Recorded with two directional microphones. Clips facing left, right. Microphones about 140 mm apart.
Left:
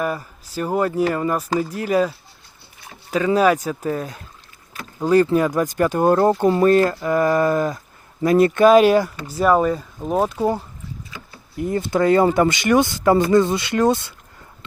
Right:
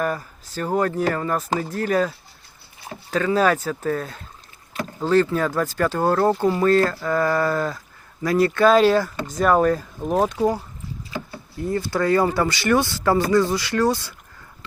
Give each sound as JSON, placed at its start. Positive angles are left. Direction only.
{"t": 0.0, "sound": "speech", "side_deg": 10}
{"t": 11.5, "sound": "speech", "side_deg": 20}